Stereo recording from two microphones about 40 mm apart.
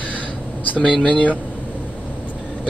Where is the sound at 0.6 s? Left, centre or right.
Left.